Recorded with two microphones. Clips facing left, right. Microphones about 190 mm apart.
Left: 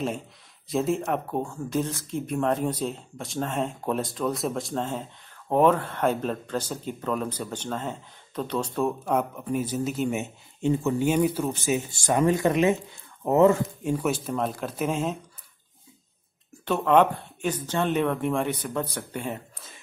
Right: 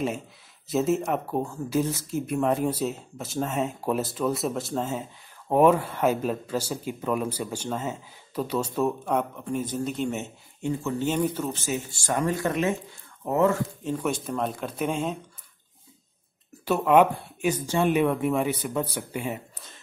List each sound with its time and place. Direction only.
0.7 s speech: centre (ahead or behind)
10.6 s speech: 15° left (ahead or behind)
13.9 s speech: 5° left (ahead or behind)
16.6 s speech: 10° right (ahead or behind)